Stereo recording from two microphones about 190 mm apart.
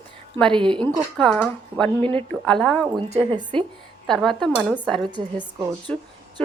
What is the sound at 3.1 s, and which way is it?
Speech, 25° right (ahead or behind).